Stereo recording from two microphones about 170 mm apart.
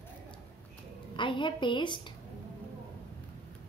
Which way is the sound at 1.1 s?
30° left (ahead or behind).